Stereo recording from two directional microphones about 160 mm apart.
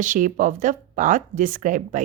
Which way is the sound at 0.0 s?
55° right (ahead or behind).